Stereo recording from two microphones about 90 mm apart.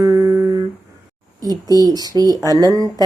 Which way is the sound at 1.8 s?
45° right (ahead or behind).